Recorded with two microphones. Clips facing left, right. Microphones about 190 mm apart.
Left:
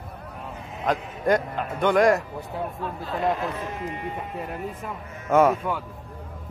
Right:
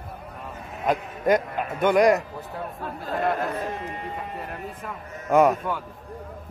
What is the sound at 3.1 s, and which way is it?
Speech, 50° right (ahead or behind).